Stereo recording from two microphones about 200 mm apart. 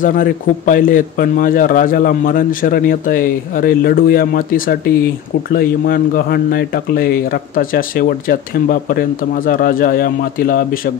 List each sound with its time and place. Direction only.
0.0 s speech: 45° left (ahead or behind)